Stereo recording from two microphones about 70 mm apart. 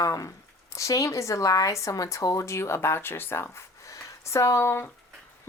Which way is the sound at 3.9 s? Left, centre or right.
Left.